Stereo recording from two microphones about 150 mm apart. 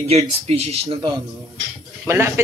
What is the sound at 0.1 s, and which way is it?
Speech, 45° right (ahead or behind).